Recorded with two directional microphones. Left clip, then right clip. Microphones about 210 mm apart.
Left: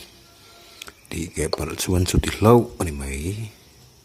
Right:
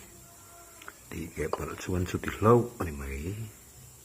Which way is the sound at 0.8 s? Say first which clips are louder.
Left 9 dB; 70° left (ahead or behind).